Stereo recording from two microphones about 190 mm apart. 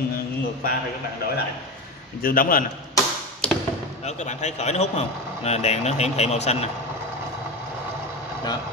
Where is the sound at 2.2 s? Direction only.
50° left (ahead or behind).